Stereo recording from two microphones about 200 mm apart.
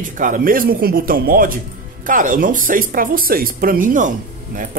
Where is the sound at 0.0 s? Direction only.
40° right (ahead or behind).